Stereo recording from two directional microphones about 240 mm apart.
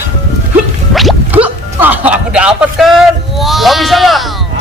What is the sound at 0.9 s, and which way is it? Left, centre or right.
Music, centre.